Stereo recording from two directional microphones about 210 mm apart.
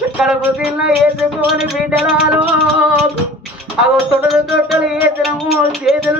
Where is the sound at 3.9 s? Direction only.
Centre (ahead or behind).